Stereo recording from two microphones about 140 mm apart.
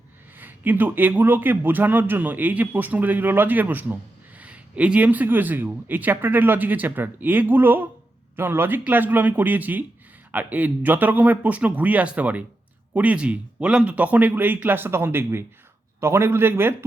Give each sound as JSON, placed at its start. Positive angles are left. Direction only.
{"t": 0.3, "sound": "a man's voice", "side_deg": -15}